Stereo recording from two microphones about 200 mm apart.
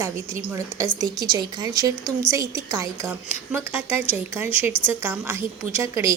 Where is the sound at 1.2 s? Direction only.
20° right (ahead or behind).